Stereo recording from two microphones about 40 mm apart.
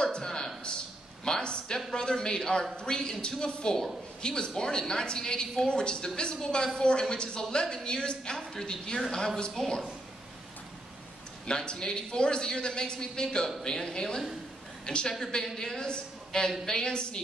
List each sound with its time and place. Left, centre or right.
0.0 s a sound: centre
1.2 s a woman's voice: left
9.6 s a woman's voice: centre
11.4 s a man's voice: centre